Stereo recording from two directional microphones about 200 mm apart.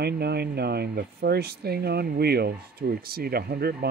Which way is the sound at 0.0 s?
55° right (ahead or behind).